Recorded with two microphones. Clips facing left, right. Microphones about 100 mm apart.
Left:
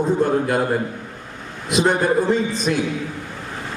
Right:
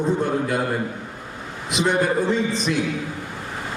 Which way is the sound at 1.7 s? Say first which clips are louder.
Left 3 dB; 45° left (ahead or behind).